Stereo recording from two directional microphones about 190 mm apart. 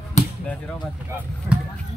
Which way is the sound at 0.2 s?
40° left (ahead or behind).